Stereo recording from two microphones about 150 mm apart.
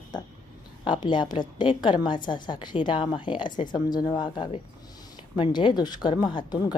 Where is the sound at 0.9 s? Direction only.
30° left (ahead or behind).